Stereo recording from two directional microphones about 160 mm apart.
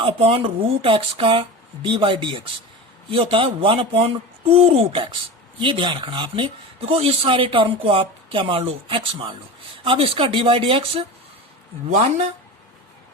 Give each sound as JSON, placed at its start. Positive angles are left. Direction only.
{"t": 0.0, "sound": "speech", "side_deg": -35}